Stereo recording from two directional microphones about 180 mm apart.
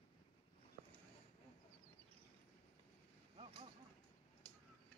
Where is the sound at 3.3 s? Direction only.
30° right (ahead or behind).